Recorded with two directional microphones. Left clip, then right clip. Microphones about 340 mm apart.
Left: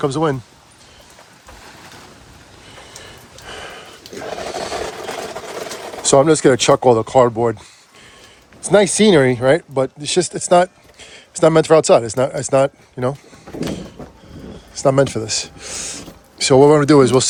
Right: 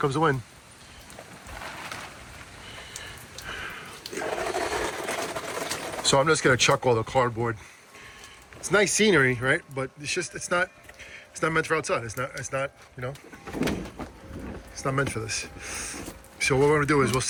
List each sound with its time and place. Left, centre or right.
0.0 s speech: centre
6.0 s speech: centre
8.6 s speech: centre
12.3 s speech: left
14.8 s speech: centre